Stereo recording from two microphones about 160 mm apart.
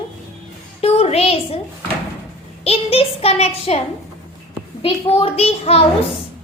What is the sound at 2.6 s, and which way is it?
A child's voice, 40° left (ahead or behind).